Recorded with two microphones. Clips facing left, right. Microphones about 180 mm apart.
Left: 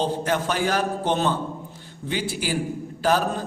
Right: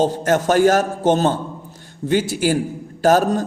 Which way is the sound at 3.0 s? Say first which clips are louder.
Right 7 dB; 45° right (ahead or behind).